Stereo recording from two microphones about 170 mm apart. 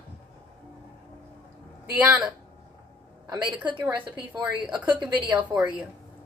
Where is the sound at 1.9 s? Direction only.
5° right (ahead or behind).